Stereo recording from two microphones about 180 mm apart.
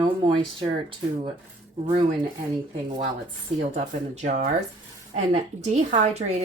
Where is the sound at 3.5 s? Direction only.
40° right (ahead or behind).